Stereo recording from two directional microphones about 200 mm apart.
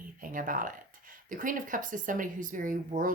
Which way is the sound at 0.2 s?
45° right (ahead or behind).